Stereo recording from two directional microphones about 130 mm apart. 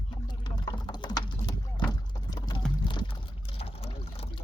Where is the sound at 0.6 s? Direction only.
30° left (ahead or behind).